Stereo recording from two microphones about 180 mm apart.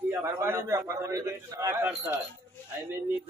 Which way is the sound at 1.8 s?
10° right (ahead or behind).